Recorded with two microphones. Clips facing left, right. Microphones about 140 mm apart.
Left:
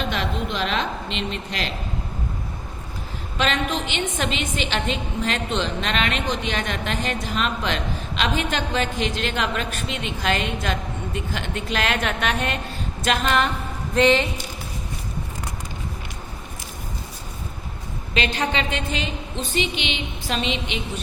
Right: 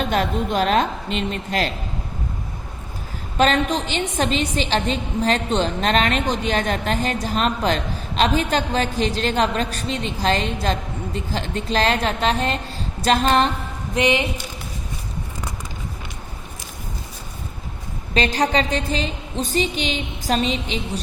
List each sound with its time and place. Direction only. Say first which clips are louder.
0.0 s a woman's voice: right 5 dB; 45° right (ahead or behind)
3.3 s a woman's voice: right 5 dB; 40° right (ahead or behind)
13.9 s speech: left 2 dB; 15° right (ahead or behind)
18.1 s a woman's voice: right 4 dB; 40° right (ahead or behind)